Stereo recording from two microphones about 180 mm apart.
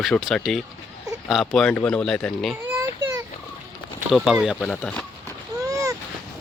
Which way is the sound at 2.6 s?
15° right (ahead or behind).